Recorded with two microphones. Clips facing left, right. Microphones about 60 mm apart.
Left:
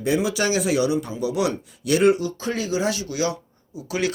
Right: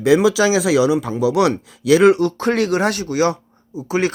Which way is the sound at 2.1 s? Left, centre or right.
Right.